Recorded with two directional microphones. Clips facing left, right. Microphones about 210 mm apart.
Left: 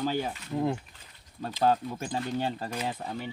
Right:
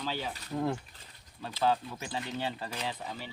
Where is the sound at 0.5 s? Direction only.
15° left (ahead or behind).